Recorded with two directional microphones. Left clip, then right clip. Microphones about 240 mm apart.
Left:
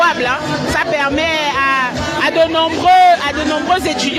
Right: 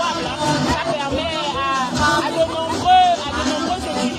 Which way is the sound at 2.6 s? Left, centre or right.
Left.